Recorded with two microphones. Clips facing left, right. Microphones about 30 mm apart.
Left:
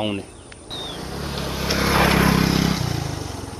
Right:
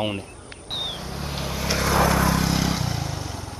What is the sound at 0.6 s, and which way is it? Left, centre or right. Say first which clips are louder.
Vehicle: right 2 dB; centre.